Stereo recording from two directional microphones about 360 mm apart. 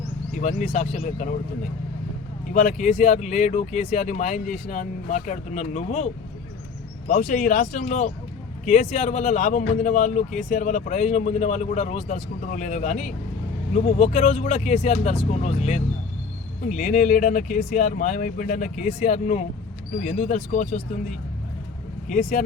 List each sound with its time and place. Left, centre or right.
0.3 s speech: centre
2.5 s speech: left
7.1 s speech: left
22.1 s speech: left